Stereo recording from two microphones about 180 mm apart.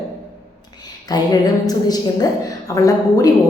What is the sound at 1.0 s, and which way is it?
A woman's voice, 20° left (ahead or behind).